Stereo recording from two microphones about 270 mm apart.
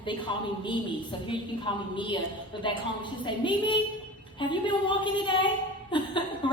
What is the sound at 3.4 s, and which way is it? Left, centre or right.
A woman's voice, centre.